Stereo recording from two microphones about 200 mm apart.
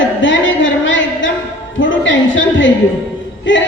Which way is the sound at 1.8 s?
70° left (ahead or behind).